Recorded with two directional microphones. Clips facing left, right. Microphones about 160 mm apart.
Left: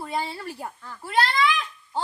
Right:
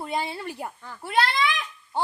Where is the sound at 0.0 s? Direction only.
20° right (ahead or behind).